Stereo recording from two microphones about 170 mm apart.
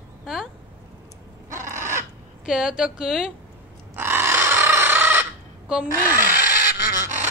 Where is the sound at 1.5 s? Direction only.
15° right (ahead or behind).